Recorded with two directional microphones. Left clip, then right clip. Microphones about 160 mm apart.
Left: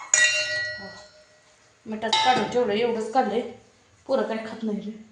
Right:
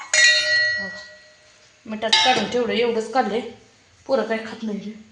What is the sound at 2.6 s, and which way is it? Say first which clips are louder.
Speech: right 3 dB; 45° right (ahead or behind).